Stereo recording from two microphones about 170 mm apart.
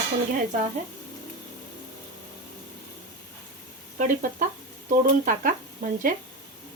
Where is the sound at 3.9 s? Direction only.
55° right (ahead or behind).